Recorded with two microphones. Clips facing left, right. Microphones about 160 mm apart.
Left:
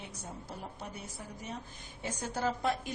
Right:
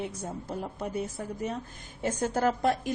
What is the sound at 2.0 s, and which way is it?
Speech, 50° right (ahead or behind).